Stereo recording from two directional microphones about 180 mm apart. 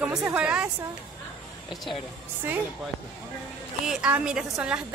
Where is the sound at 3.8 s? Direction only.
5° right (ahead or behind).